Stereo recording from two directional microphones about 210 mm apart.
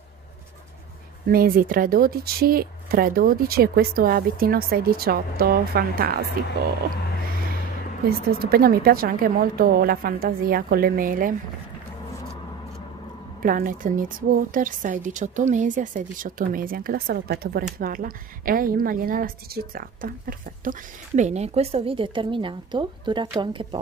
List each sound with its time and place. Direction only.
1.2 s speech: 45° right (ahead or behind)
8.3 s speech: 45° right (ahead or behind)
13.4 s a woman's voice: 40° right (ahead or behind)
21.2 s a woman's voice: 30° right (ahead or behind)